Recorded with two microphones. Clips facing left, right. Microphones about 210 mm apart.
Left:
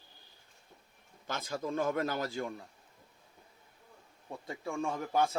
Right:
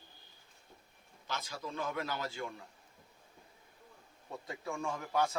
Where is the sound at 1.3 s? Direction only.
50° left (ahead or behind).